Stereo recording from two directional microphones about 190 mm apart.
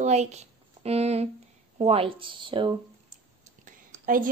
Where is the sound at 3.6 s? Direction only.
45° right (ahead or behind).